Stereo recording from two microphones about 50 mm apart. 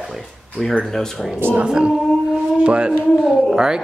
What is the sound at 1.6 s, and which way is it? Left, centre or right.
Speech, centre.